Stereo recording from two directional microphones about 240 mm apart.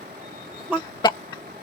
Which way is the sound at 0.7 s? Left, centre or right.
Centre.